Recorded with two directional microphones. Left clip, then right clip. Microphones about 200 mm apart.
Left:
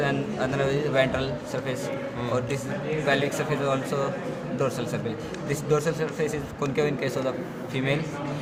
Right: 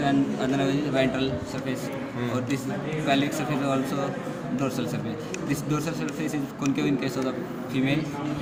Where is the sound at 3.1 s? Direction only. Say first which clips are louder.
Even; 50° left (ahead or behind).